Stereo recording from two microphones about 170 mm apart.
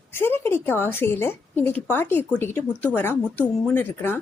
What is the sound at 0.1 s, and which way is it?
A woman's voice, 15° left (ahead or behind).